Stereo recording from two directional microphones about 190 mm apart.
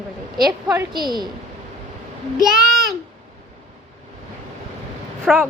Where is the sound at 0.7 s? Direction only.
20° right (ahead or behind).